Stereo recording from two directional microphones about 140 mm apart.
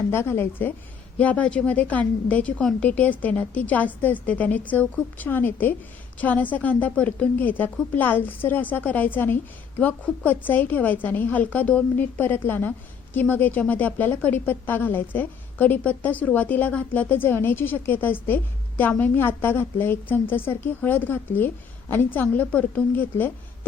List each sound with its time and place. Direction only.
0.1 s a woman's voice: 15° left (ahead or behind)